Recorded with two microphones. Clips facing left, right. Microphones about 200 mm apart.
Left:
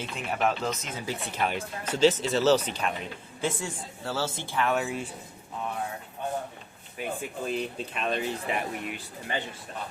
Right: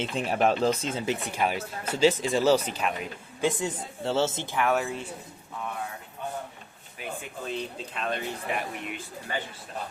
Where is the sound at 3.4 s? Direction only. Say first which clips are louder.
Right 4 dB; 20° right (ahead or behind).